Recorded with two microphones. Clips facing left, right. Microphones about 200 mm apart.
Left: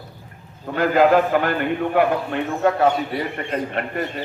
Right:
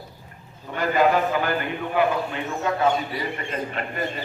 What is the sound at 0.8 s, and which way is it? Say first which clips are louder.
A man's voice: left 5 dB; 60° left (ahead or behind).